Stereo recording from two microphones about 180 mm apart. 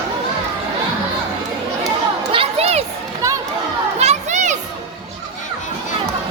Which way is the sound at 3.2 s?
15° right (ahead or behind).